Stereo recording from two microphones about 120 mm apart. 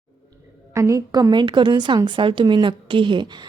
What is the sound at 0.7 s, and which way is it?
A woman's voice, 25° right (ahead or behind).